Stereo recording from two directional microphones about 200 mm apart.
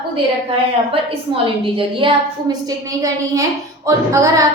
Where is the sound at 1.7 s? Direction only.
25° right (ahead or behind).